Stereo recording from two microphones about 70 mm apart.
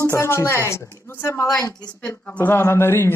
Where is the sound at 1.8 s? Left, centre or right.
Centre; by 3.1 s left.